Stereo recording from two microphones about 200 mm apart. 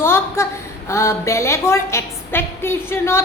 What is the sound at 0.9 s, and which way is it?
A woman's voice, 15° left (ahead or behind).